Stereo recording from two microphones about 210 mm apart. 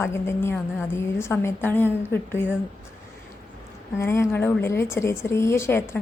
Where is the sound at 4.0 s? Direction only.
10° left (ahead or behind).